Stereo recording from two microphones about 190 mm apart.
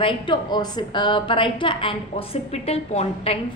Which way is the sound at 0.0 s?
25° left (ahead or behind).